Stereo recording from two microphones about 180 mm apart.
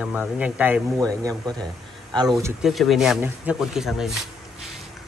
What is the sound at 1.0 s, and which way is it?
Speech, 20° right (ahead or behind).